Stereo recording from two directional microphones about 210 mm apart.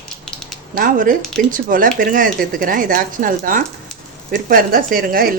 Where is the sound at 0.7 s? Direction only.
40° right (ahead or behind).